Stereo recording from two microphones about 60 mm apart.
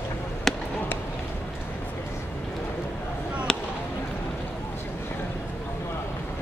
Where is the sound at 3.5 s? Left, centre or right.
Centre.